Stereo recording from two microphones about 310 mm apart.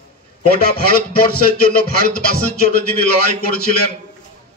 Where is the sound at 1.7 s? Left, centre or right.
Left.